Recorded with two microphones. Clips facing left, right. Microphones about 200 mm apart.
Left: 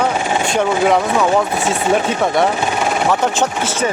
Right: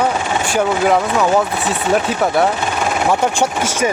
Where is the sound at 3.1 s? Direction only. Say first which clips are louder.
Even; 10° right (ahead or behind).